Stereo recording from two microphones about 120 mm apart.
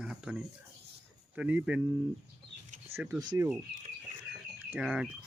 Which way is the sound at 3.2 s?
35° right (ahead or behind).